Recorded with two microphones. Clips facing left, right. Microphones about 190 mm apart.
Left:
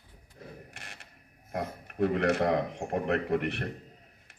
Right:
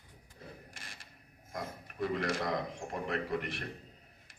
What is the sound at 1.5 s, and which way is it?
A man's voice, 60° left (ahead or behind).